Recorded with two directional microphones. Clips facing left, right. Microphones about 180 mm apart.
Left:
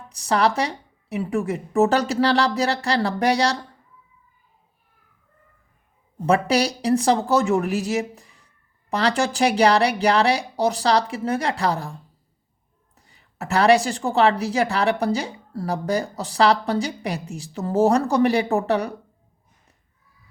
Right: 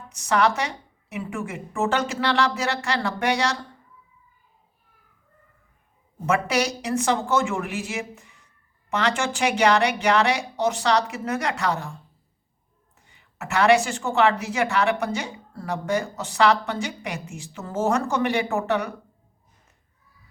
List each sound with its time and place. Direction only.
0.1 s a woman's voice: 35° left (ahead or behind)
6.2 s a woman's voice: 35° left (ahead or behind)
13.0 s a woman's voice: 35° left (ahead or behind)